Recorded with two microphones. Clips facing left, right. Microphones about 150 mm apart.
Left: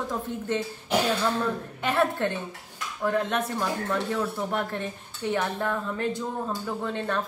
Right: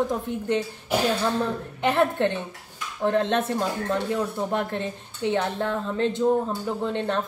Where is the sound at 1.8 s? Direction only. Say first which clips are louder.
Right 4 dB; 20° right (ahead or behind).